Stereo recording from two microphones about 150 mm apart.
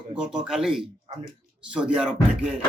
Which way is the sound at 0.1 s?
5° right (ahead or behind).